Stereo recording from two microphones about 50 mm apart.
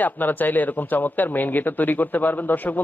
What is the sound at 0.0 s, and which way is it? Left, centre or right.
Speech, left.